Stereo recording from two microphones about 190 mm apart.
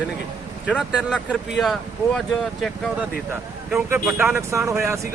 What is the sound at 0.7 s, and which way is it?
Speech, 5° right (ahead or behind).